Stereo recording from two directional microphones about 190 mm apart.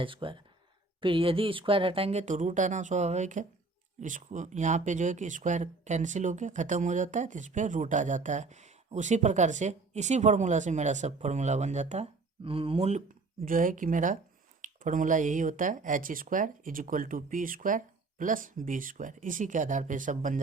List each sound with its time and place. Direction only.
0.0 s speech: 25° right (ahead or behind)
13.4 s speech: 45° right (ahead or behind)